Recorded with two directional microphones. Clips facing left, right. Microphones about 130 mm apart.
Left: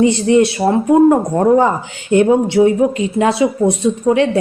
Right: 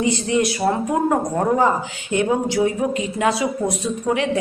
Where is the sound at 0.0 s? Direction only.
30° left (ahead or behind).